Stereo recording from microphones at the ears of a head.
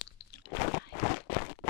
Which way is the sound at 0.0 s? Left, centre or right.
Left.